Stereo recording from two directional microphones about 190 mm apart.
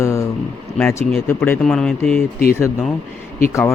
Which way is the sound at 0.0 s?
15° left (ahead or behind).